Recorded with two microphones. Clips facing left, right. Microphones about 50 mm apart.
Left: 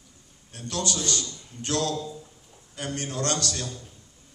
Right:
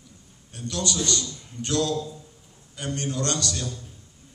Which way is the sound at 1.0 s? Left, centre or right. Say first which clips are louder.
Right 2 dB; left.